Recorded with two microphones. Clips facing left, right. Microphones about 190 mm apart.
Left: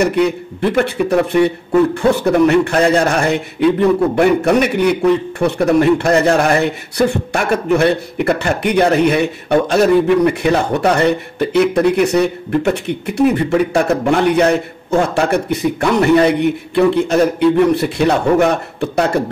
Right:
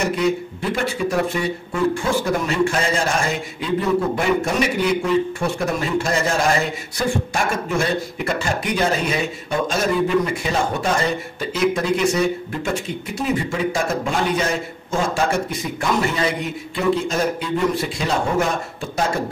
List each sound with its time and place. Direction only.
0.0 s speech: 65° left (ahead or behind)